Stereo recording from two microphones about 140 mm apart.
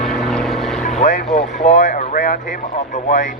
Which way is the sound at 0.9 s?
55° left (ahead or behind).